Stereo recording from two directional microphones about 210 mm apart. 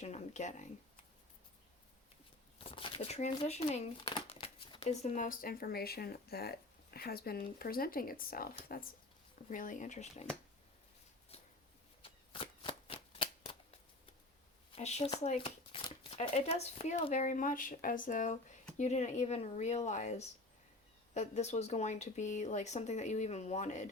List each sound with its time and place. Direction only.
0.0 s speech: 35° left (ahead or behind)
2.6 s speech: 25° left (ahead or behind)
12.0 s shuffling cards: 25° left (ahead or behind)
14.8 s speech: 30° left (ahead or behind)